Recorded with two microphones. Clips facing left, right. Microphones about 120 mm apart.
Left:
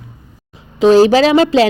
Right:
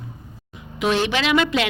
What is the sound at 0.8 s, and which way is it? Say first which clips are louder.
Speech: left 13 dB; 35° left (ahead or behind).